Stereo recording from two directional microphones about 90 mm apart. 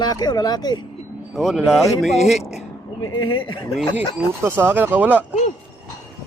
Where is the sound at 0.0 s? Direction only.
50° left (ahead or behind).